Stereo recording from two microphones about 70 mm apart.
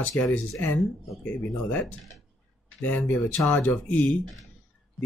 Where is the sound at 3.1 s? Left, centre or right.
Left.